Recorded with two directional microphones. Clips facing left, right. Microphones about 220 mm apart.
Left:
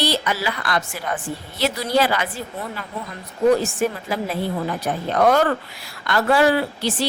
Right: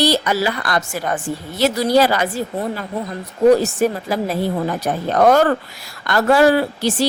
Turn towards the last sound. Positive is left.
turn(degrees=-40)  # may be behind; listen again after turning